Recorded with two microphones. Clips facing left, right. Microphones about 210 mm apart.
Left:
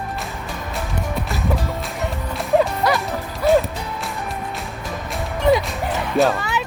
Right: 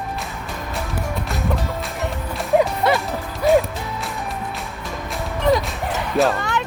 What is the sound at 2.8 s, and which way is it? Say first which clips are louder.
Music: right 1 dB; 25° right (ahead or behind).